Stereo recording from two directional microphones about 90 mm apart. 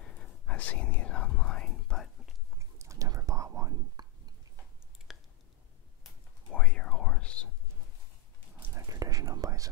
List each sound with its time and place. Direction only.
0.0 s whispering: 10° left (ahead or behind)
2.6 s whispering: 35° right (ahead or behind)
4.0 s a sound: 50° right (ahead or behind)
5.1 s a sound: 5° right (ahead or behind)
6.5 s whispering: 10° left (ahead or behind)
8.7 s whispering: 40° right (ahead or behind)